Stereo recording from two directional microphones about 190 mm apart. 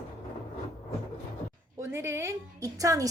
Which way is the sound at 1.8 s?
15° right (ahead or behind).